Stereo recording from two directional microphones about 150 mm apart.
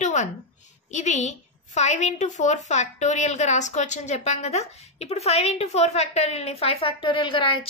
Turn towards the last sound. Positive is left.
turn(degrees=35)  # may be behind; listen again after turning